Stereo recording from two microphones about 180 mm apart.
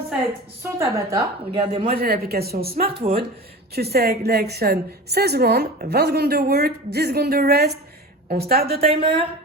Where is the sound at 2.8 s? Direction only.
30° right (ahead or behind).